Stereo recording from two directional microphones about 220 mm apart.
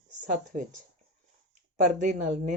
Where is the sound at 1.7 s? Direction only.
35° right (ahead or behind).